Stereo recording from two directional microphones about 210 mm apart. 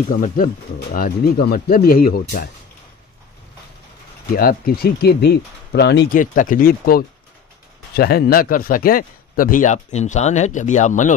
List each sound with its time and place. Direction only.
0.1 s speech: 40° left (ahead or behind)
4.3 s speech: 45° left (ahead or behind)